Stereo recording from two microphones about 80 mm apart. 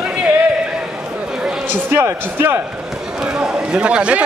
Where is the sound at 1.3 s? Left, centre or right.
Centre.